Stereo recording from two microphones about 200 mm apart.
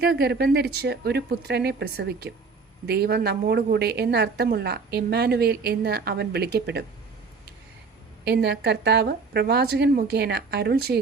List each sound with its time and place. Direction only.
0.0 s a woman's voice: 50° right (ahead or behind)
8.3 s a woman's voice: 55° right (ahead or behind)